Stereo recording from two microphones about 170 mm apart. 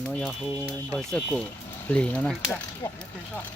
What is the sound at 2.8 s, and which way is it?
Speech, 25° left (ahead or behind).